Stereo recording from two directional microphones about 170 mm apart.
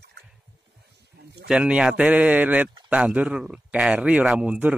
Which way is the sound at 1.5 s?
5° right (ahead or behind).